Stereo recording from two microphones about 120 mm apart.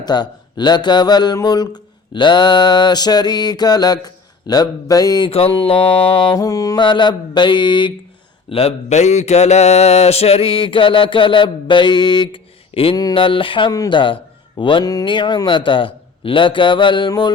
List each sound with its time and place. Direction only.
0.0 s speech: 35° left (ahead or behind)
5.3 s mantra: 50° left (ahead or behind)
6.3 s mantra: 30° left (ahead or behind)
6.8 s speech: 40° left (ahead or behind)
8.4 s mantra: 55° left (ahead or behind)
13.7 s speech: 30° left (ahead or behind)
14.6 s mantra: 45° left (ahead or behind)
17.1 s speech: 40° left (ahead or behind)